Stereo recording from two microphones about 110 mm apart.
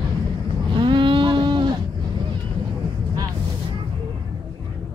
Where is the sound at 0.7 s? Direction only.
45° right (ahead or behind).